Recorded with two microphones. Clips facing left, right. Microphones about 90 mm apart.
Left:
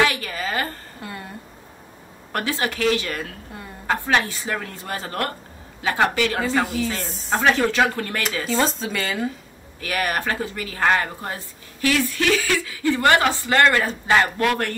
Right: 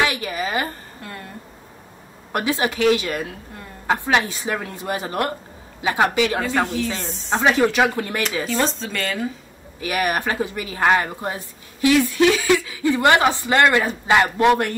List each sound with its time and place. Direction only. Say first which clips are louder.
0.0 s a sound: even; 20° right (ahead or behind)
1.0 s speech: left 2 dB; 5° left (ahead or behind)
2.3 s speech: right 3 dB; 20° right (ahead or behind)
6.6 s speech: right 1 dB; 5° left (ahead or behind)
7.4 s speech: right 2 dB; 15° right (ahead or behind)
8.6 s speech: even; 5° left (ahead or behind)
9.8 s speech: right 2 dB; 20° right (ahead or behind)